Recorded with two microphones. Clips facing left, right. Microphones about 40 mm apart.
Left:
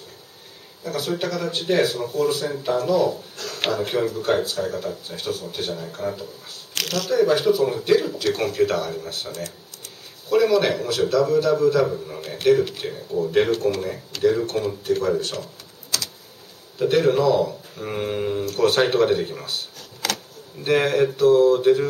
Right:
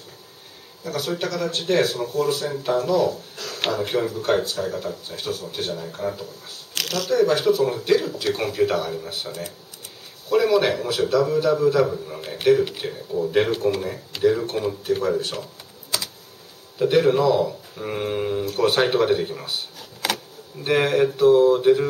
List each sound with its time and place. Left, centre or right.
0.8 s speech: centre
15.9 s typing: centre
16.7 s speech: centre